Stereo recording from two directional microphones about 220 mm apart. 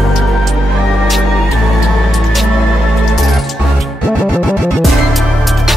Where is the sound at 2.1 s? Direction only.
Centre (ahead or behind).